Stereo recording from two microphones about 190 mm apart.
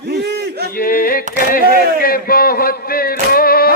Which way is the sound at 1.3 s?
50° left (ahead or behind).